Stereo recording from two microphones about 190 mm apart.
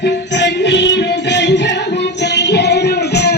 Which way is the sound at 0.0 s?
65° left (ahead or behind).